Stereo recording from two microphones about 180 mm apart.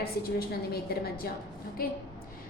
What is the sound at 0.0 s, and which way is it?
A woman's voice, 60° left (ahead or behind).